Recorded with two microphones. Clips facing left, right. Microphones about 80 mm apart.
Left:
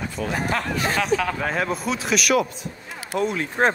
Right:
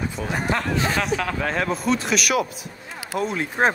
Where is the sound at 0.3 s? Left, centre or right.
Centre.